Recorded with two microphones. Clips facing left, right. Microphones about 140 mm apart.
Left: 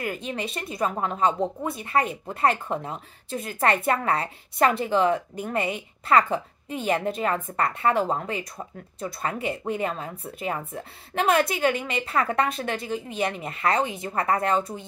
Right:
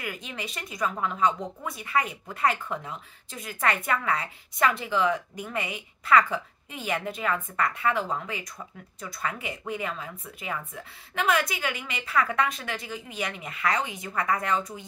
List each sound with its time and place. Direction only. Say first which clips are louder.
0.0 s speech: left 6 dB; 35° left (ahead or behind)